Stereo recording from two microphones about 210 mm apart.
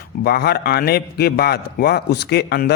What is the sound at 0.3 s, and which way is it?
A man's voice, 50° left (ahead or behind).